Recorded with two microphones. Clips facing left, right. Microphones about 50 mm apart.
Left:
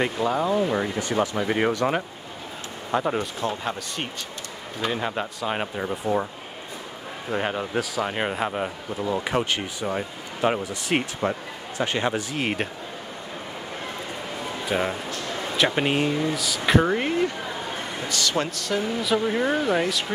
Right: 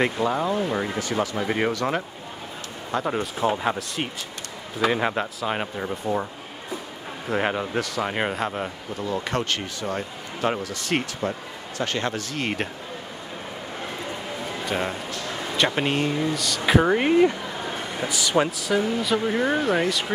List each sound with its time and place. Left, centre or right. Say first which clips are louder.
0.0 s speech: right 1 dB; centre
2.9 s speech: left 2 dB; centre
3.3 s a man's voice: right 4 dB; centre
4.8 s a man's voice: right 5 dB; right
5.1 s speech: right 1 dB; centre
7.3 s a man's voice: right 1 dB; centre
7.8 s a man's voice: right 1 dB; centre
14.7 s speech: left 3 dB; centre
16.8 s a man's voice: right 5 dB; centre